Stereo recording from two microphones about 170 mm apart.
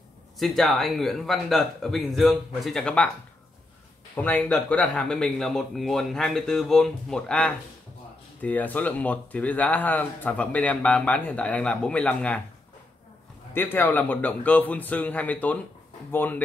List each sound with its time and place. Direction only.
0.4 s a man's voice: centre (ahead or behind)
4.1 s a man's voice: 10° left (ahead or behind)
13.5 s speech: 10° left (ahead or behind)